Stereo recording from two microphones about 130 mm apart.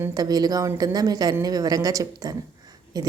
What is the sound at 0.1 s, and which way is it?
A woman's voice, 30° right (ahead or behind).